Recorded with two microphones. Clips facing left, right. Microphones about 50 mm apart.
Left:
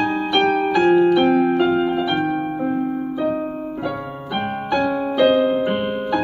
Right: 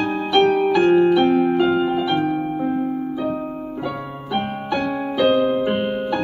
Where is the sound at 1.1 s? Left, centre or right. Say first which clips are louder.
Even; centre.